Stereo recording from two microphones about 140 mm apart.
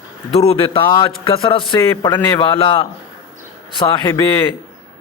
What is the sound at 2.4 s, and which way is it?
Speech, 35° left (ahead or behind).